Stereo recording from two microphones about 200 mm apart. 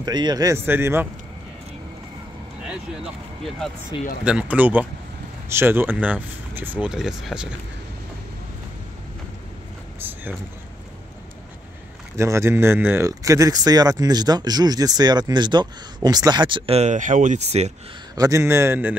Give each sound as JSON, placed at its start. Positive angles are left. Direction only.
{"t": 0.0, "sound": "speech", "side_deg": -20}
{"t": 3.4, "sound": "speech", "side_deg": 0}
{"t": 9.9, "sound": "boat", "side_deg": -10}
{"t": 12.2, "sound": "speech", "side_deg": -15}
{"t": 18.1, "sound": "speech", "side_deg": -15}